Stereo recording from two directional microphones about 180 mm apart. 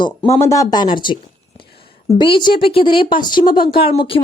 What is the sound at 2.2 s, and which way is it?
A woman's voice, 25° left (ahead or behind).